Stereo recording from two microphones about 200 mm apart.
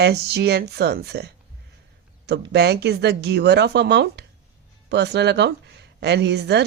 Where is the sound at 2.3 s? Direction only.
55° right (ahead or behind).